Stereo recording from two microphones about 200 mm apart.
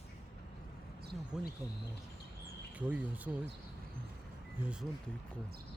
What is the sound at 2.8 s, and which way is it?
Speech, 5° right (ahead or behind).